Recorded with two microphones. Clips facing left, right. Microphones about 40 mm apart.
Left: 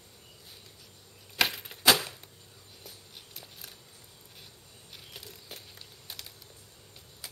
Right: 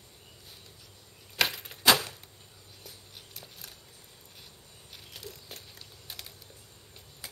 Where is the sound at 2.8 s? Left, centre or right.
Centre.